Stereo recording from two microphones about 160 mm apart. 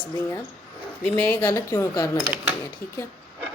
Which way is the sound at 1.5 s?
20° left (ahead or behind).